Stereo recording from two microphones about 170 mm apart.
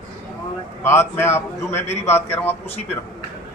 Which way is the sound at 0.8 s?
15° left (ahead or behind).